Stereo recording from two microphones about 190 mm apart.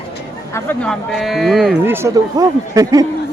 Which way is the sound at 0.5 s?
10° left (ahead or behind).